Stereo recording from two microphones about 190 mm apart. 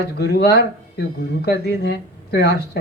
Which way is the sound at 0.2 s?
60° left (ahead or behind).